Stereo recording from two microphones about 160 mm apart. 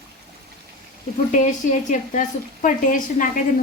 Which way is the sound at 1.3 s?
50° left (ahead or behind).